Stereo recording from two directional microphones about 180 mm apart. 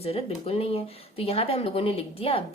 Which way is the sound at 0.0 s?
35° left (ahead or behind).